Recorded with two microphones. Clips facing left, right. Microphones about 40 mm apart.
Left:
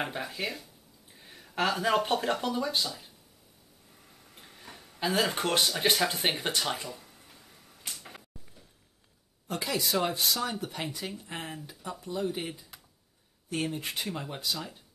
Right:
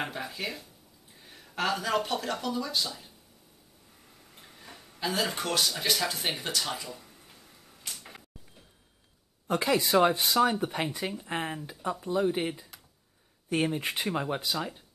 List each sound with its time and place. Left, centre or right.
0.0 s speech: centre
1.1 s a sound: centre
1.5 s a man's voice: centre
2.8 s speech: centre
4.0 s a sound: centre
5.0 s speech: left
7.0 s arrow: centre
9.5 s speech: centre